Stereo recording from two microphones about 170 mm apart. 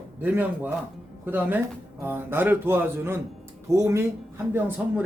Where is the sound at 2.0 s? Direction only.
15° right (ahead or behind).